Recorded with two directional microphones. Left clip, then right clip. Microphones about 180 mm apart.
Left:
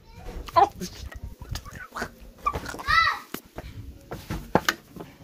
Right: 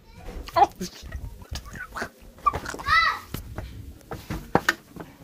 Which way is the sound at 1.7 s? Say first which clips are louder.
Right 1 dB; 10° left (ahead or behind).